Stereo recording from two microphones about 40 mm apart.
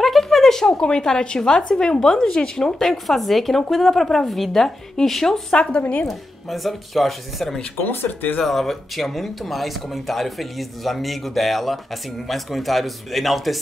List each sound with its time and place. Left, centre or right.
0.0 s a woman's voice: centre
5.6 s a woman's voice: left
6.0 s speech: centre
7.8 s speech: left
8.5 s speech: centre